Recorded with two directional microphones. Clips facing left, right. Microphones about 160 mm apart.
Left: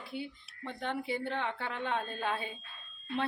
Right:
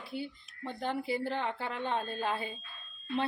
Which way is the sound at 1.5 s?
35° right (ahead or behind).